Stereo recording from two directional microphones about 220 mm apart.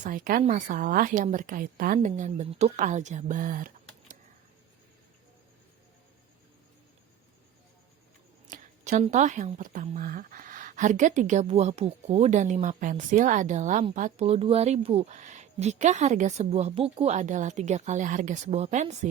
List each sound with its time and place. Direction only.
0.0 s a woman's voice: 35° right (ahead or behind)
8.4 s a woman's voice: 35° right (ahead or behind)